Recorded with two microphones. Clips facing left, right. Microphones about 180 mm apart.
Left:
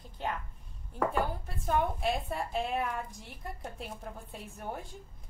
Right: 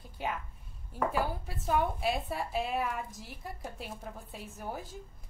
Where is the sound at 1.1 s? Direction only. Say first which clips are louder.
Even; 5° right (ahead or behind).